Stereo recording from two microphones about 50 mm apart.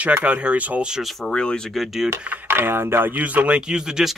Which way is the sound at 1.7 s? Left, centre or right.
Centre.